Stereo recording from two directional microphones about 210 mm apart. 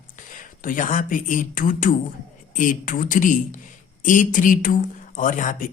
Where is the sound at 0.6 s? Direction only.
40° left (ahead or behind).